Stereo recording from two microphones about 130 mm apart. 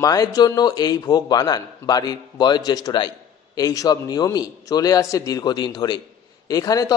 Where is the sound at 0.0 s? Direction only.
30° left (ahead or behind).